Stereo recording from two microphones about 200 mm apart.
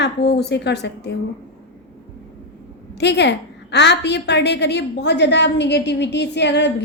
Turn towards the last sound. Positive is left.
turn(degrees=60)  # may be behind; listen again after turning